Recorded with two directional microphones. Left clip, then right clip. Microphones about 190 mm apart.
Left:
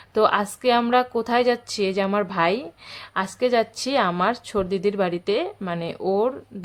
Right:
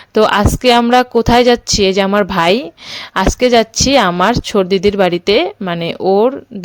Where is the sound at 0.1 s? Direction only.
40° right (ahead or behind).